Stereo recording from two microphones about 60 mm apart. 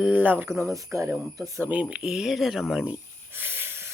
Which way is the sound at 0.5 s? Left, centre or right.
Right.